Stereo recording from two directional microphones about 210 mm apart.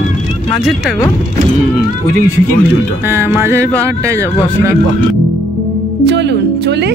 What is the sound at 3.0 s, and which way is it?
Speech, 10° right (ahead or behind).